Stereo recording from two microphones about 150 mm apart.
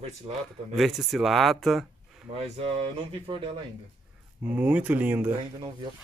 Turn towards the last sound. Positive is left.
turn(degrees=-10)  # may be behind; listen again after turning